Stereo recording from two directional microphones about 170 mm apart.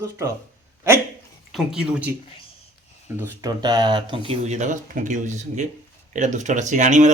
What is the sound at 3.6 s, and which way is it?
Speech, 25° right (ahead or behind).